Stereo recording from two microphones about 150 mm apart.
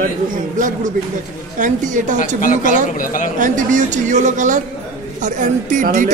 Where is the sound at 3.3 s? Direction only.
60° right (ahead or behind).